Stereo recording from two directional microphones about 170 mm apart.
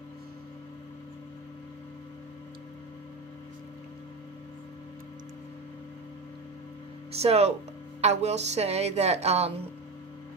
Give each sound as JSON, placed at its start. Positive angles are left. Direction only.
{"t": 7.1, "sound": "a woman's voice", "side_deg": -35}